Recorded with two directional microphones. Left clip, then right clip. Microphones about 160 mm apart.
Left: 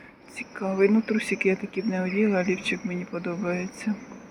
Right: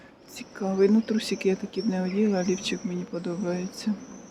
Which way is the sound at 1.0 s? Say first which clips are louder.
Left 2 dB; 20° right (ahead or behind).